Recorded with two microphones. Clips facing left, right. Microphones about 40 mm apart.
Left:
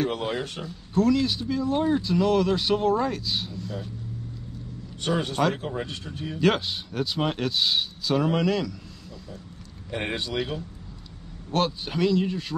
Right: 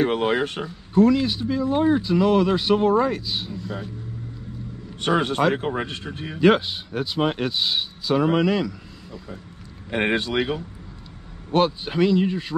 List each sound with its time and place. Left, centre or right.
0.0 s a man's voice: right
0.9 s speech: centre
5.1 s a man's voice: right
6.4 s speech: centre
9.8 s a man's voice: right
11.5 s speech: centre